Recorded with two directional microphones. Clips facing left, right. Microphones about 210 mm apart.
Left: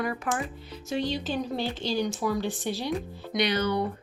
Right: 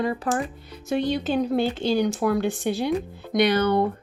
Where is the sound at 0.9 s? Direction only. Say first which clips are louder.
Right 6 dB; 60° right (ahead or behind).